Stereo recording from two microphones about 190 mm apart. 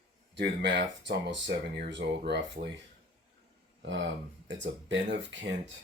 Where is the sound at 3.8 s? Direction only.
75° right (ahead or behind).